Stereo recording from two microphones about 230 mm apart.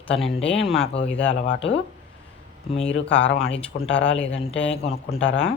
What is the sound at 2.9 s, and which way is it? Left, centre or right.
Speech, centre.